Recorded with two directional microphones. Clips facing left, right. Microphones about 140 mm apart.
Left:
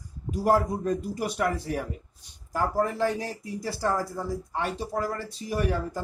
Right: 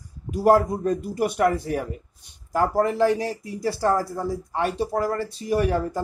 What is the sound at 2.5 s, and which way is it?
Speech, 70° right (ahead or behind).